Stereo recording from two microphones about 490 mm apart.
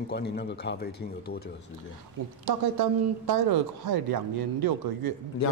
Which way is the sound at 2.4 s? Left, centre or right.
Right.